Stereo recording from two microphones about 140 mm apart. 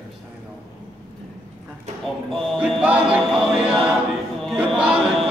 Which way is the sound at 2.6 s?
10° right (ahead or behind).